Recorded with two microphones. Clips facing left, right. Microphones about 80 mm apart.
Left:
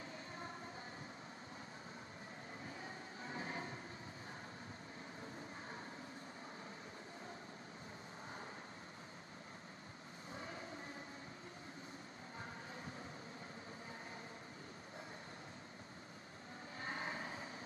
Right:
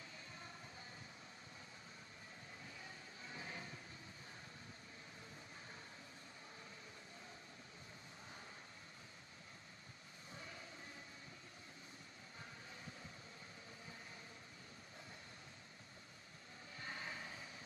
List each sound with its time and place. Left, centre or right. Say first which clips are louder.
2.6 s train: left 7 dB; left
10.3 s vehicle: left 6 dB; left
16.8 s vehicle: left 5 dB; left